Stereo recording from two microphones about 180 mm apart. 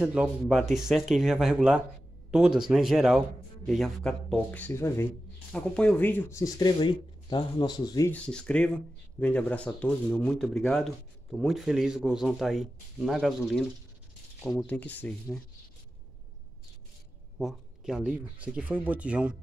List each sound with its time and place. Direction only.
0.0 s speech: 5° right (ahead or behind); by 8.1 s 20° left (ahead or behind)
8.1 s speech: 5° left (ahead or behind)
14.6 s speech: 10° left (ahead or behind)
17.4 s speech: centre (ahead or behind)